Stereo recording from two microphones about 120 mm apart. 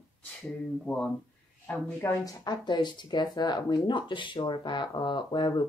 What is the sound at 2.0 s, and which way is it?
Speech, 25° left (ahead or behind).